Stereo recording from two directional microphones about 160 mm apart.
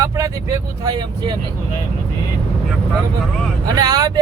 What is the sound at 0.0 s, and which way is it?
Speech, 20° right (ahead or behind).